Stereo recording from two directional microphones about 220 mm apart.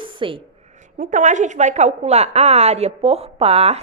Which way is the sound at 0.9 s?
35° right (ahead or behind).